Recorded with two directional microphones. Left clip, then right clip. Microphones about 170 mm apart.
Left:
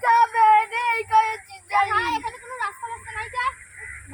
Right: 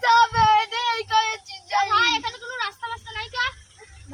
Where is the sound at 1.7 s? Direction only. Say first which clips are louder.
Left 2 dB; 25° right (ahead or behind).